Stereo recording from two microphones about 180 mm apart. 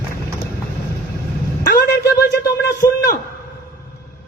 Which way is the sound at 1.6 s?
65° left (ahead or behind).